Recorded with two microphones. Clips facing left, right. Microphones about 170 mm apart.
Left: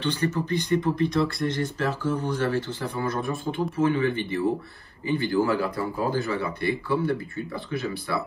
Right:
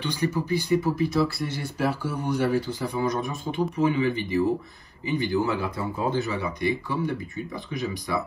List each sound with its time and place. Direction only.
0.0 s speech: 10° right (ahead or behind)